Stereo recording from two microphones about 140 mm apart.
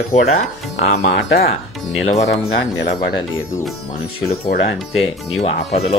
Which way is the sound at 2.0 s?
55° left (ahead or behind).